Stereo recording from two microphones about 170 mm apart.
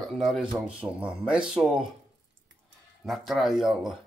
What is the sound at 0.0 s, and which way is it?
Speech, centre (ahead or behind).